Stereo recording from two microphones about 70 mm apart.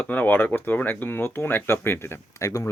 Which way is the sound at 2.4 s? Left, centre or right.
Left.